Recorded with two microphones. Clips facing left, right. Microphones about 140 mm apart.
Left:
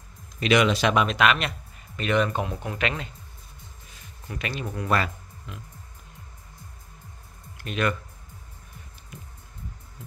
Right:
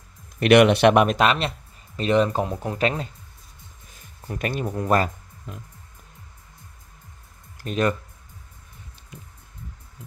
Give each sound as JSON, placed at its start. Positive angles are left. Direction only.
{"t": 0.4, "sound": "speech", "side_deg": -60}
{"t": 1.1, "sound": "speech", "side_deg": -35}
{"t": 3.9, "sound": "music", "side_deg": -45}
{"t": 7.5, "sound": "speech", "side_deg": -35}